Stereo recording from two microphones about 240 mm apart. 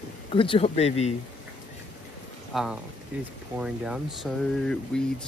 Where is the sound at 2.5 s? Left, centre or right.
Centre.